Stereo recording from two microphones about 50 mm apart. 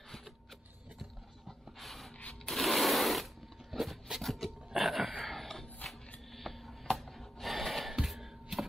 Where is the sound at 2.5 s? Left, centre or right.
Centre.